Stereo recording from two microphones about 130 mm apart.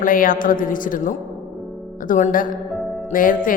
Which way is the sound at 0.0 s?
90° left.